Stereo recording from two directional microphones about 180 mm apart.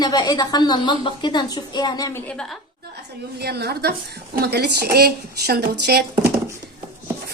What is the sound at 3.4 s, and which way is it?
Speech, 60° right (ahead or behind).